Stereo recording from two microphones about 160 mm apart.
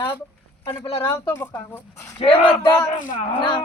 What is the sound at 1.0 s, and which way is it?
Speech, 15° left (ahead or behind).